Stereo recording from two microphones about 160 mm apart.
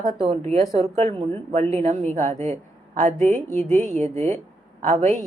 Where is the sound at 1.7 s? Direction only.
45° right (ahead or behind).